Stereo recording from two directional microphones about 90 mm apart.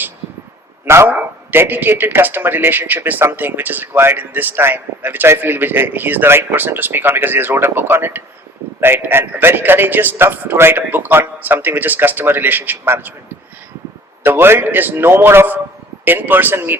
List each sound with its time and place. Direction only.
0.9 s speech: 30° right (ahead or behind)
14.3 s speech: 25° right (ahead or behind)